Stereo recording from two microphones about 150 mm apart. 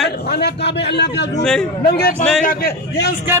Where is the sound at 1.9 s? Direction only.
90° left.